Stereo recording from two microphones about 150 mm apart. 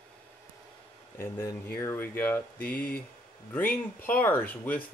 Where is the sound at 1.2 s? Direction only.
15° left (ahead or behind).